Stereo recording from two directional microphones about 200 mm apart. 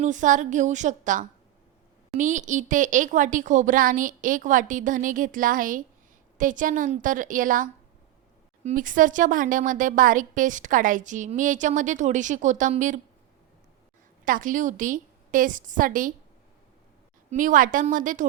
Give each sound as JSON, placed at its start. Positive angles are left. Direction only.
{"t": 0.0, "sound": "speech", "side_deg": -40}
{"t": 14.3, "sound": "speech", "side_deg": -40}
{"t": 17.3, "sound": "speech", "side_deg": -40}